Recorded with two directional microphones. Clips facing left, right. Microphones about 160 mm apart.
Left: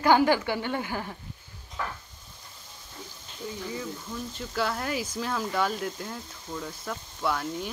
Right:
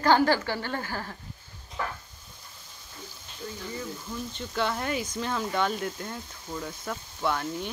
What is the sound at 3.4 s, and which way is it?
Speech, 5° left (ahead or behind).